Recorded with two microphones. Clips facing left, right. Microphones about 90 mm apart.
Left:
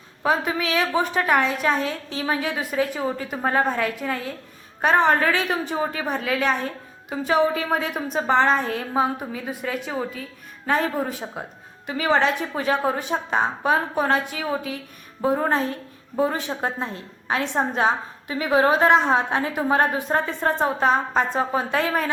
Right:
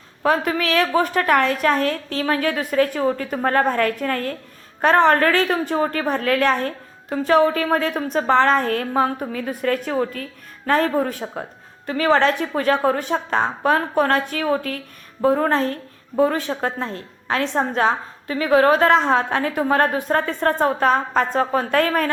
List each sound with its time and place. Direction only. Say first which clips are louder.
0.3 s a woman's voice: right 3 dB; 15° left (ahead or behind)